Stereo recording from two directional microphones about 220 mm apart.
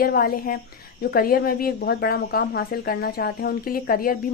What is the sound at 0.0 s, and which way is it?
A woman's voice, 40° left (ahead or behind).